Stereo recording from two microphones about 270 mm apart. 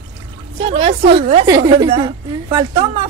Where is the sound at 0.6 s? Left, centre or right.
Right.